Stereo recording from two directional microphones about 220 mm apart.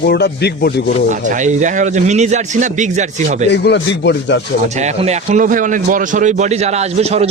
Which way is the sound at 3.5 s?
50° left (ahead or behind).